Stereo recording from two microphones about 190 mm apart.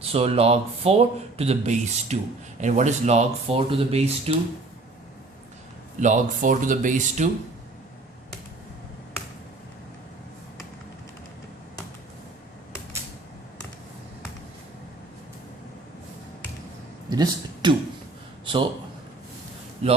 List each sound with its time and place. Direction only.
0.0 s speech: 30° right (ahead or behind)
6.0 s speech: 40° right (ahead or behind)
17.1 s a sound: 20° right (ahead or behind)
18.4 s a man's voice: 25° right (ahead or behind)
19.8 s speech: 35° right (ahead or behind)